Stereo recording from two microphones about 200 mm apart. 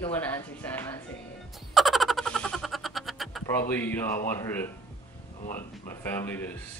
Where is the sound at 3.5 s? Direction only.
10° left (ahead or behind).